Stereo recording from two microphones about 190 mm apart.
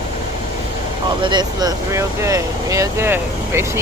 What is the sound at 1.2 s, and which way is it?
Speech, 25° right (ahead or behind).